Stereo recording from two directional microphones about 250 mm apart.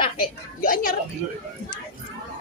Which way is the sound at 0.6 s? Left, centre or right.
Left.